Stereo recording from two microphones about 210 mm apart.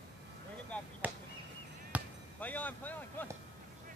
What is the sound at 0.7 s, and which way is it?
Chop, 5° left (ahead or behind).